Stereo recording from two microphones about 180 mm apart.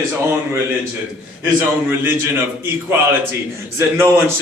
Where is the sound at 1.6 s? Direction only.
15° right (ahead or behind).